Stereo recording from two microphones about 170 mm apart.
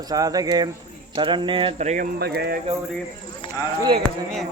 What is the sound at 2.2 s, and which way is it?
Speech, 70° right (ahead or behind).